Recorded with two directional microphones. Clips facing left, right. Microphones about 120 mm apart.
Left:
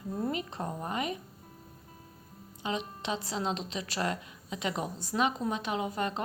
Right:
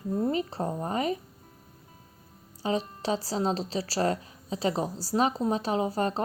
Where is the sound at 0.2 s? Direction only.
30° right (ahead or behind).